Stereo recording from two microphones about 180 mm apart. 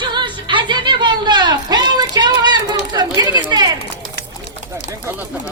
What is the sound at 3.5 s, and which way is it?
Run, 25° right (ahead or behind).